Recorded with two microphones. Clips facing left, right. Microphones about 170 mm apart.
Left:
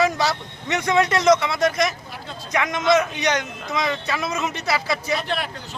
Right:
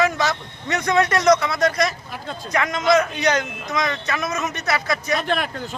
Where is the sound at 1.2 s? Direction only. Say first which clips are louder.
Even; 25° left (ahead or behind).